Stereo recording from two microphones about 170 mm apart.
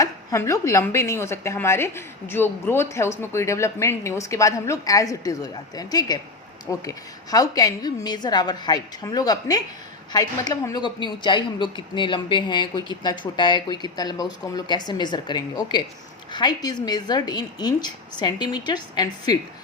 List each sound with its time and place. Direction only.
0.0 s a woman's voice: 20° left (ahead or behind)